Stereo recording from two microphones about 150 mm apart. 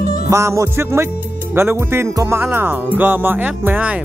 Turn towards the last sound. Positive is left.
turn(degrees=-10)  # may be behind; listen again after turning